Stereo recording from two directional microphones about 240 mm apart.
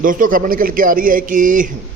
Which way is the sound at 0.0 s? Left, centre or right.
Right.